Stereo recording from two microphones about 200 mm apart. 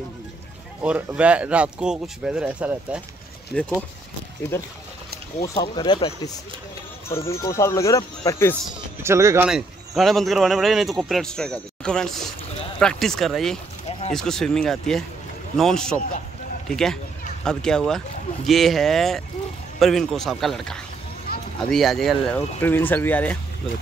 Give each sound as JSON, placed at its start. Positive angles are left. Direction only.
{"t": 0.8, "sound": "speech", "side_deg": -5}
{"t": 7.1, "sound": "speech", "side_deg": 15}
{"t": 9.0, "sound": "speech", "side_deg": -15}
{"t": 9.5, "sound": "speech", "side_deg": 0}
{"t": 13.8, "sound": "a sound", "side_deg": 30}
{"t": 14.1, "sound": "speech", "side_deg": 0}
{"t": 21.3, "sound": "a sound", "side_deg": 50}
{"t": 21.7, "sound": "speech", "side_deg": 0}